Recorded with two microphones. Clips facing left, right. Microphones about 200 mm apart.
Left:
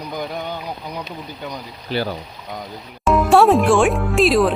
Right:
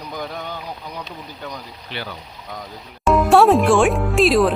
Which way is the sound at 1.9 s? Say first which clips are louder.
Left 9 dB; 40° left (ahead or behind).